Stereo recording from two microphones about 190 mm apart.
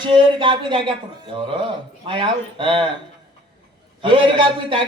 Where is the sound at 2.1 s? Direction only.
25° right (ahead or behind).